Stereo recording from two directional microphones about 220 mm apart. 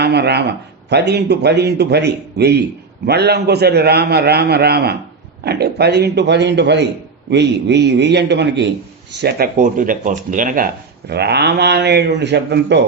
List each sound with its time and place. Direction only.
0.0 s a man's voice: 50° right (ahead or behind)
9.2 s speech: 40° right (ahead or behind)
11.1 s a man's voice: 50° right (ahead or behind)